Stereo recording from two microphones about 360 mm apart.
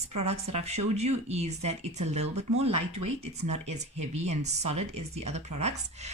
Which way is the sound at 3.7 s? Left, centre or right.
Centre.